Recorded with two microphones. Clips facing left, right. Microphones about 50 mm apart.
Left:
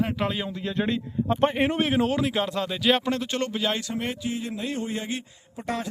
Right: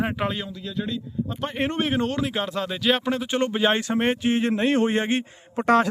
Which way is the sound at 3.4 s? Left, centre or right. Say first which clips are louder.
Right 5 dB; right.